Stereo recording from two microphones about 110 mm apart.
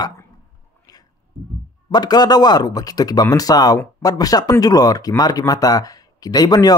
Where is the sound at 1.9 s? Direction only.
40° left (ahead or behind).